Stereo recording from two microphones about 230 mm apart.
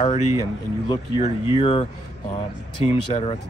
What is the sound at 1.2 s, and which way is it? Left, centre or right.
Speech, left.